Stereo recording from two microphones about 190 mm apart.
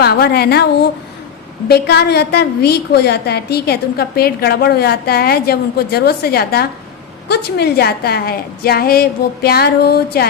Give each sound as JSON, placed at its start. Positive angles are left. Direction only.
{"t": 0.0, "sound": "a woman's voice", "side_deg": 55}